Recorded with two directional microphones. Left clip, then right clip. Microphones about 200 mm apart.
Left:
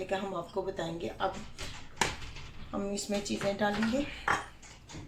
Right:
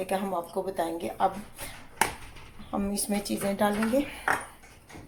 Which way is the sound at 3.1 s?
55° right (ahead or behind).